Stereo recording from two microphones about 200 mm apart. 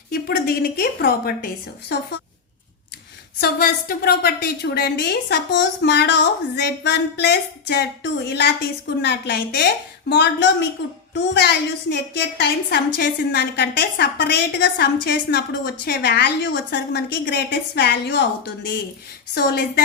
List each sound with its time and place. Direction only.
0.1 s a woman's voice: 50° left (ahead or behind)
3.4 s a woman's voice: 50° left (ahead or behind)